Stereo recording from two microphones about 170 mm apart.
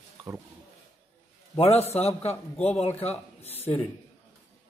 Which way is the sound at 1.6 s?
40° left (ahead or behind).